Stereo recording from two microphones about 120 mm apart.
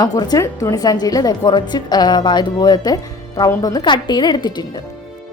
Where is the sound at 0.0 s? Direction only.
30° left (ahead or behind).